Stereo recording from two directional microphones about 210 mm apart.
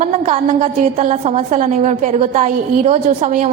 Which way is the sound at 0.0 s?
35° right (ahead or behind).